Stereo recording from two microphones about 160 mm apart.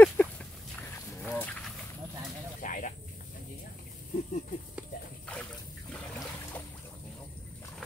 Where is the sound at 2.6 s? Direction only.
55° left (ahead or behind).